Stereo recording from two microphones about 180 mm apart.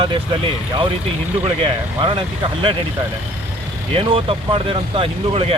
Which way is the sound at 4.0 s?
30° right (ahead or behind).